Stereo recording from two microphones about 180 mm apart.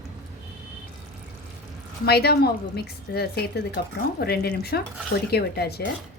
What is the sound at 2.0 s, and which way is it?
A woman's voice, 60° left (ahead or behind).